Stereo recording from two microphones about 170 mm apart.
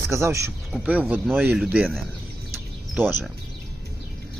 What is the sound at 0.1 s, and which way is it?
Speech, 15° right (ahead or behind).